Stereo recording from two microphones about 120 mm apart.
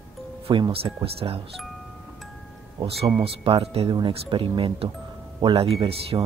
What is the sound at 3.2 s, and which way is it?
Speech, 50° right (ahead or behind).